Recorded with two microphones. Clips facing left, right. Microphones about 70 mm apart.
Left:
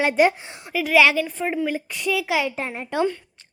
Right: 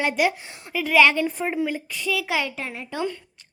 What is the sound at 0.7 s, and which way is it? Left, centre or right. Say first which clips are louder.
Speech: left 1 dB; centre.